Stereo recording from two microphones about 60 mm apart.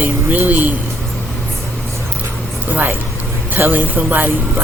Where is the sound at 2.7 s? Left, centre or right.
Right.